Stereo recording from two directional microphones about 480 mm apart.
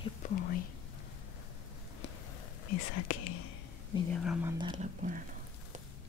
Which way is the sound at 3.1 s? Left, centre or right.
Left.